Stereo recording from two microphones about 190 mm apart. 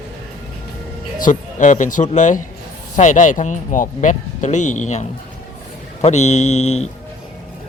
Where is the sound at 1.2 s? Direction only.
40° left (ahead or behind).